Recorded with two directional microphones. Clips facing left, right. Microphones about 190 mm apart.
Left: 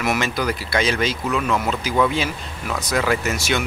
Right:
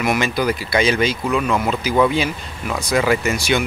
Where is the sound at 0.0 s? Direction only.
Centre (ahead or behind).